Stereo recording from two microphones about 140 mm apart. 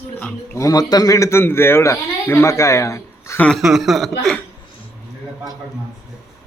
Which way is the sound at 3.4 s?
Centre (ahead or behind).